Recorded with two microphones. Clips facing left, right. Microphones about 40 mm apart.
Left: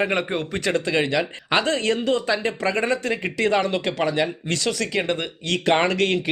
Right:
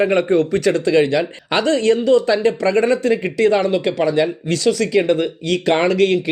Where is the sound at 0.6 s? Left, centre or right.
Left.